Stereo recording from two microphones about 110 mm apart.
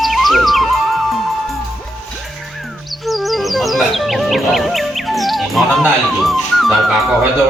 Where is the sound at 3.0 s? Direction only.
Centre (ahead or behind).